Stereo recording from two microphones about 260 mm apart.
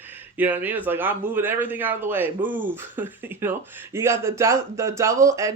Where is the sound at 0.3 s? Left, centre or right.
Centre.